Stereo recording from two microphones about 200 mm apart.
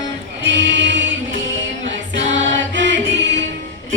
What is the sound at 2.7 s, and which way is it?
Music, 65° right (ahead or behind).